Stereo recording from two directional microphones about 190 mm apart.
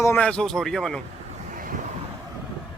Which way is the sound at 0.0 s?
10° left (ahead or behind).